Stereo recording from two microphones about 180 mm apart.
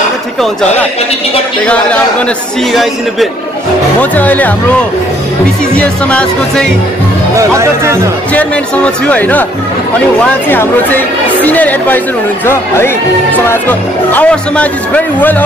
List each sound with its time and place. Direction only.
2.7 s a man's voice: centre (ahead or behind)
5.8 s speech: 5° left (ahead or behind)
7.3 s speech: 15° right (ahead or behind)
8.3 s speech: 5° left (ahead or behind)
10.5 s speech: 10° left (ahead or behind)